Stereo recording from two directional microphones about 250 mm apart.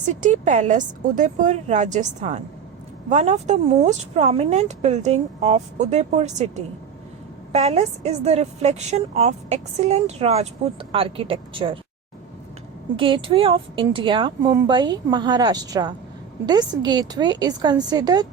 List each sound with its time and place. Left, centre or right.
0.0 s a woman's voice: right
7.5 s a woman's voice: right
13.0 s speech: right